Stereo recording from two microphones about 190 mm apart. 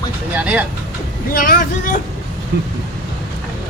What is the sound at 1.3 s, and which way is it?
Speech, 50° left (ahead or behind).